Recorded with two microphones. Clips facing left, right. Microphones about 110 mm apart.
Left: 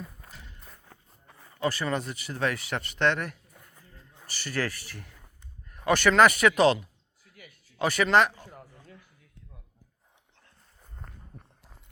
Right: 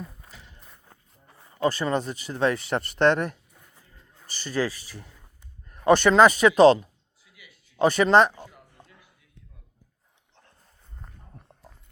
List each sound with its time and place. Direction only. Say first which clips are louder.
1.5 s speech: right 4 dB; 25° right (ahead or behind)
4.3 s speech: right 4 dB; 20° right (ahead or behind)
5.6 s speech: right 5 dB; 25° right (ahead or behind)
6.6 s speech: right 7 dB; 35° right (ahead or behind)